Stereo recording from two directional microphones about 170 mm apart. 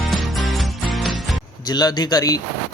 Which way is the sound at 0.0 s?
Centre (ahead or behind).